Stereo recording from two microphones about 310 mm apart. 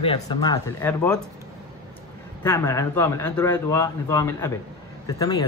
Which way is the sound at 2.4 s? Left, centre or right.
Centre.